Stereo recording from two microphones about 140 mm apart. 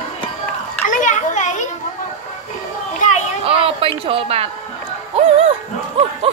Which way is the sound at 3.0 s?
60° left (ahead or behind).